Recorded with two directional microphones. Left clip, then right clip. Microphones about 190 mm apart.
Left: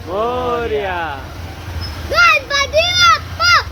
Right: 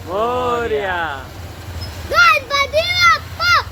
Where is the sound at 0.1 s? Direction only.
25° right (ahead or behind).